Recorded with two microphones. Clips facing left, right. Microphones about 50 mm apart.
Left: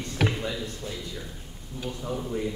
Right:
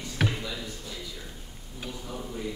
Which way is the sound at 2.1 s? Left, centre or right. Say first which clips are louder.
Left 8 dB; centre.